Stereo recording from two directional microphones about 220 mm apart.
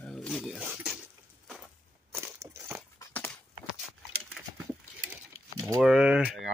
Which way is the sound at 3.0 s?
10° left (ahead or behind).